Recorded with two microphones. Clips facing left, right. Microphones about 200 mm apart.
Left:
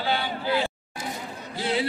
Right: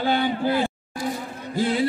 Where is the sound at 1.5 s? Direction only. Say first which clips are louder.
Right 4 dB; 45° right (ahead or behind).